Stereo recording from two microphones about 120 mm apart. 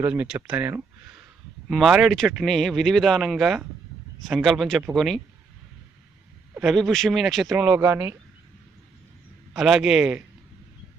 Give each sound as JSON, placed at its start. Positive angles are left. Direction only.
{"t": 0.0, "sound": "speech", "side_deg": -10}
{"t": 6.6, "sound": "speech", "side_deg": 0}
{"t": 7.5, "sound": "speech", "side_deg": -15}
{"t": 9.5, "sound": "speech", "side_deg": -5}